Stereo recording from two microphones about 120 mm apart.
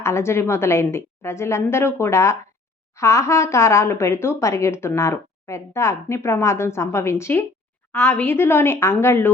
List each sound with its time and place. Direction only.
0.0 s speech: 20° left (ahead or behind)